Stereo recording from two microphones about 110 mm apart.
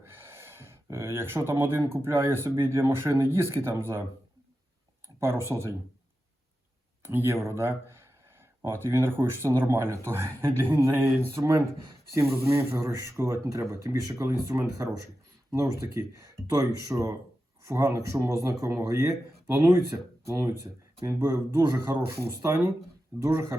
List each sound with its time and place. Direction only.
0.0 s speech: 20° right (ahead or behind)
5.0 s speech: 25° right (ahead or behind)
7.0 s a man's voice: 25° right (ahead or behind)